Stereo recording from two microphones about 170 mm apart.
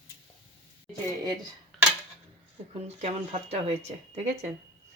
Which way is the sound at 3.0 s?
40° right (ahead or behind).